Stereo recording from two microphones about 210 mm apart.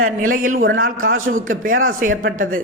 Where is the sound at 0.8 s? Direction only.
70° right (ahead or behind).